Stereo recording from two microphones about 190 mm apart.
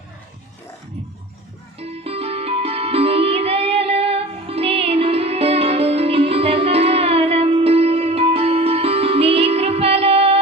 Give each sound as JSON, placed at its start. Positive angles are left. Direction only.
{"t": 1.8, "sound": "music", "side_deg": -30}